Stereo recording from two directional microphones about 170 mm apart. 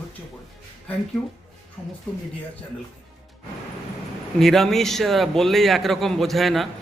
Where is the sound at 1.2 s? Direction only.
5° left (ahead or behind).